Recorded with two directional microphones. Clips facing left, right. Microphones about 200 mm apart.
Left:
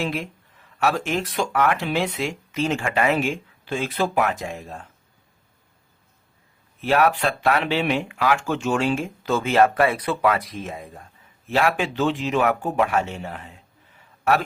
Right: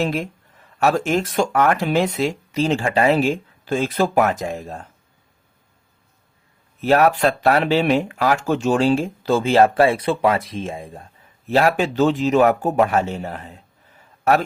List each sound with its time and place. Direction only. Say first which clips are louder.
0.0 s speech: right 5 dB; 40° right (ahead or behind)
6.8 s speech: right 4 dB; 40° right (ahead or behind)
11.4 s speech: right 4 dB; 40° right (ahead or behind)